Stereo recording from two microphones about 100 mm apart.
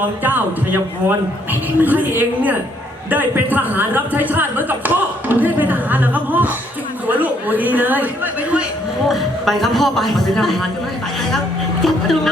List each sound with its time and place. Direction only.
0.0 s a man's voice: 20° right (ahead or behind)
9.0 s a man's voice: centre (ahead or behind)
11.8 s a man's voice: 5° left (ahead or behind)